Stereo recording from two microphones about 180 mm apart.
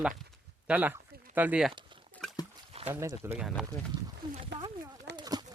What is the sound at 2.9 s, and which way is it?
Speech, 15° right (ahead or behind).